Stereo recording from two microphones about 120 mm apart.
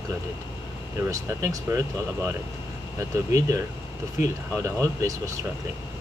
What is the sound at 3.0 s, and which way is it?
Speech, 25° right (ahead or behind).